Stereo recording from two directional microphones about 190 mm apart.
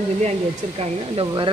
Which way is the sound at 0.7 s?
25° right (ahead or behind).